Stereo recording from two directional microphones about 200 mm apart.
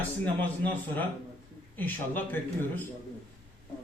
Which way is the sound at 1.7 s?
10° left (ahead or behind).